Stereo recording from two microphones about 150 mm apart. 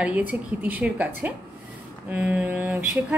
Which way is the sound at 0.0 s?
10° right (ahead or behind).